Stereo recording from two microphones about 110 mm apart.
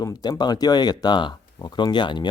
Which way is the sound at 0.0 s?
35° left (ahead or behind).